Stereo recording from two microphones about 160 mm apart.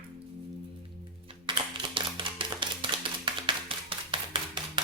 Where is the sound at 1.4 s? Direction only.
30° right (ahead or behind).